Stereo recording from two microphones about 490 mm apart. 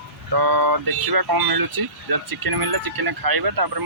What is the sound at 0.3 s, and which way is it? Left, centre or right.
Speech, right.